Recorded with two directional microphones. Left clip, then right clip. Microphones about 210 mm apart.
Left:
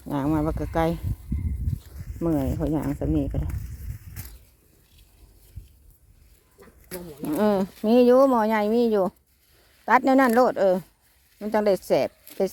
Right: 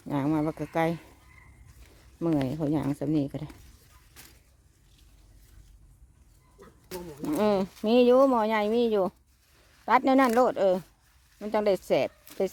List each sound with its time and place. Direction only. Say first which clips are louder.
0.1 s speech: left 3 dB; 5° left (ahead or behind)
2.2 s speech: left 2 dB; 10° right (ahead or behind)
4.2 s a sound: left 4 dB; 20° left (ahead or behind)
6.6 s speech: left 1 dB; centre (ahead or behind)